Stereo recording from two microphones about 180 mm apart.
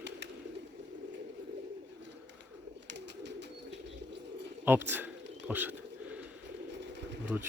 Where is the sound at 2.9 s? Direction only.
75° right (ahead or behind).